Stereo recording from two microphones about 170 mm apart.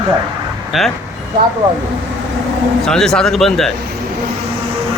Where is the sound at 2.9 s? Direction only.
5° left (ahead or behind).